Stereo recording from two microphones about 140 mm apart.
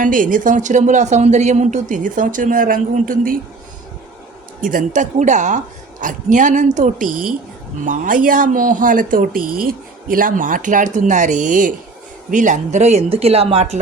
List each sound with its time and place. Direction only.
0.0 s speech: 75° right (ahead or behind)
4.6 s speech: 65° right (ahead or behind); by 13.7 s 50° right (ahead or behind)